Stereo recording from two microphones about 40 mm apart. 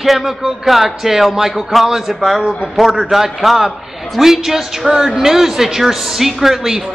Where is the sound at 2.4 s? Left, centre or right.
Right.